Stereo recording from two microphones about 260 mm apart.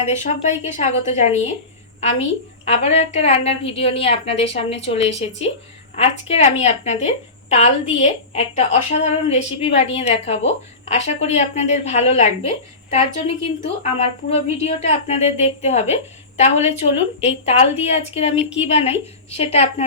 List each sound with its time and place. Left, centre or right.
0.2 s a woman's voice: left